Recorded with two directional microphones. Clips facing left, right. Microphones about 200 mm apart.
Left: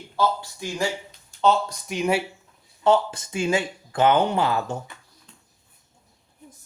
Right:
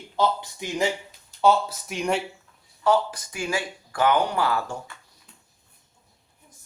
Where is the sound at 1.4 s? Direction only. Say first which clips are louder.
Right 1 dB; 5° right (ahead or behind).